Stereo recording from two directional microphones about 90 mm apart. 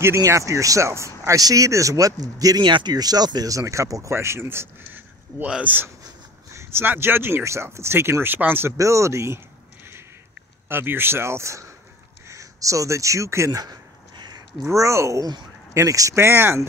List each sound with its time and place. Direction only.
0.0 s speech: 30° right (ahead or behind)
2.6 s speech: 60° right (ahead or behind); by 5.9 s 15° right (ahead or behind)
6.5 s speech: 30° right (ahead or behind)
8.7 s speech: 35° right (ahead or behind)
10.7 s speech: 25° right (ahead or behind)
12.3 s a sound: 35° right (ahead or behind)
14.7 s speech: 35° right (ahead or behind)